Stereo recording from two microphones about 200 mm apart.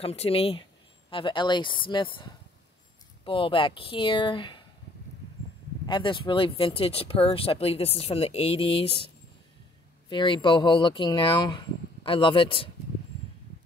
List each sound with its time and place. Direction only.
0.0 s speech: 30° left (ahead or behind)
5.9 s speech: 25° left (ahead or behind)